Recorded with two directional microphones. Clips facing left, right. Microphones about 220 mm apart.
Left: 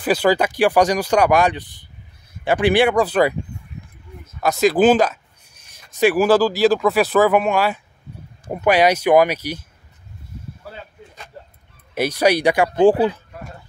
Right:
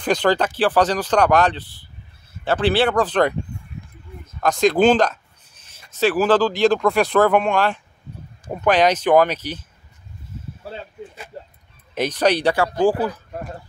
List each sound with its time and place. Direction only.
0.0 s speech: 10° left (ahead or behind)
4.4 s speech: 5° left (ahead or behind)
10.6 s arrow: 25° right (ahead or behind)
11.9 s speech: 10° left (ahead or behind)
12.6 s speech: 25° left (ahead or behind)